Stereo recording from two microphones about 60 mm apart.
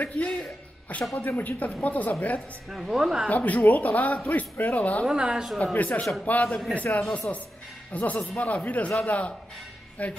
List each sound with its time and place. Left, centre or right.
0.0 s speech: left
2.7 s speech: centre
3.3 s speech: left
5.1 s speech: centre
5.6 s a man's voice: left